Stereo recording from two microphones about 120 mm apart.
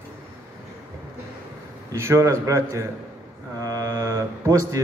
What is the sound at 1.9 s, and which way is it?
A man's voice, 25° right (ahead or behind).